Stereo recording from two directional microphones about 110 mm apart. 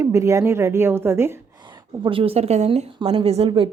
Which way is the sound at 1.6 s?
45° right (ahead or behind).